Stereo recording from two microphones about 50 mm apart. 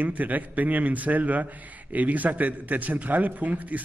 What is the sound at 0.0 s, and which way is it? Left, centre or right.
A man's voice, right.